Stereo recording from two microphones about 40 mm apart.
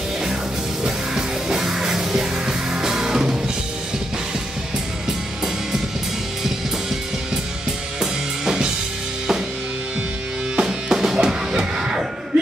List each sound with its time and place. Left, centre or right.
0.8 s music: centre
8.0 s music: centre
10.5 s music: centre